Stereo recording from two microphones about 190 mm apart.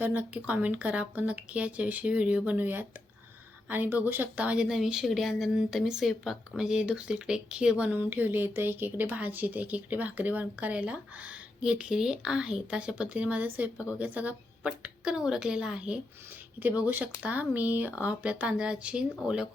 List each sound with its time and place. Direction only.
0.0 s speech: 10° right (ahead or behind)